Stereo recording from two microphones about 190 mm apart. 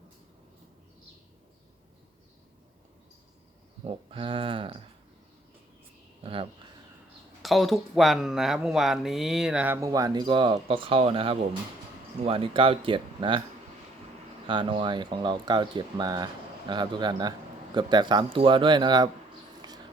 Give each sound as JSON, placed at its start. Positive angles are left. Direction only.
{"t": 3.8, "sound": "speech", "side_deg": -30}
{"t": 6.2, "sound": "speech", "side_deg": -30}
{"t": 7.4, "sound": "speech", "side_deg": 0}
{"t": 14.4, "sound": "speech", "side_deg": -25}